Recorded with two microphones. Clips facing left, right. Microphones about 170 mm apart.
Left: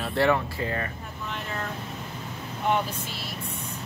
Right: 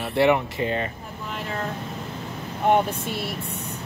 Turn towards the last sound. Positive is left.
turn(degrees=-55)  # may be behind; listen again after turning